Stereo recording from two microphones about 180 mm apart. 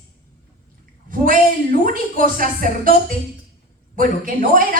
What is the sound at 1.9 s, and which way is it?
Speech, 50° right (ahead or behind).